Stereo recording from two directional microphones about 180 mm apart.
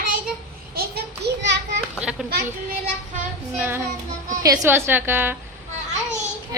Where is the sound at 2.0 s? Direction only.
5° right (ahead or behind).